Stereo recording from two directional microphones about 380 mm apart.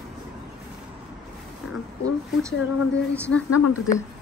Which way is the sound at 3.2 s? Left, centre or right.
Centre.